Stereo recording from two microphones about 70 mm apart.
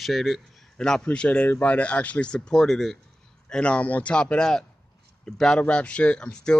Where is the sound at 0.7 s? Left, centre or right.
Centre.